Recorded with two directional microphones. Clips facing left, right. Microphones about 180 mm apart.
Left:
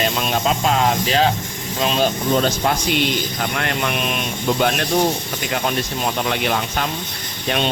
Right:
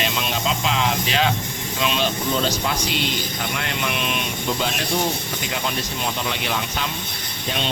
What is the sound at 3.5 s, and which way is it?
Speech, 55° left (ahead or behind).